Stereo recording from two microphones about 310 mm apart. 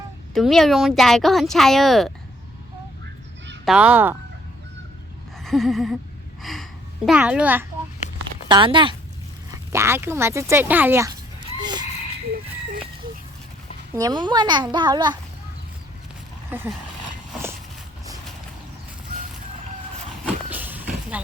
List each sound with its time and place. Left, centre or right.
0.3 s speech: centre
3.7 s speech: centre
5.4 s a sound: centre
6.4 s a child's voice: centre
11.6 s a sound: centre
13.9 s speech: centre
16.5 s speech: centre
20.2 s vehicle: centre